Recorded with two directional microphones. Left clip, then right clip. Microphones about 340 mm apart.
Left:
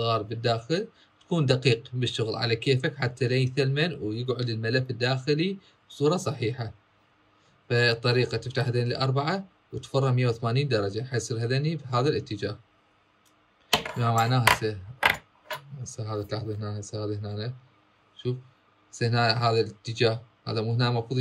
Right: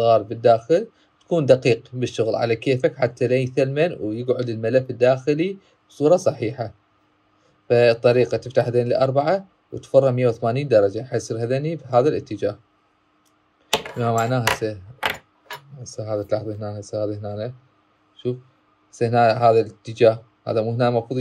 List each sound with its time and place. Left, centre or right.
0.0 s speech: centre
13.7 s speech: centre
14.6 s a sound: centre
15.8 s speech: centre
18.9 s a man's voice: centre